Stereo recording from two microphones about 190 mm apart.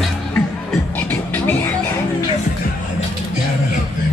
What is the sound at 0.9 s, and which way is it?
Music, 10° left (ahead or behind).